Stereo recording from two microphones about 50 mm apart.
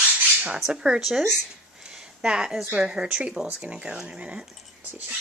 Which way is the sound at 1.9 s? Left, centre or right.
Centre.